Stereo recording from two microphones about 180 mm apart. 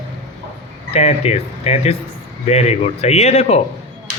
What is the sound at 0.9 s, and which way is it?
Speech, 35° left (ahead or behind).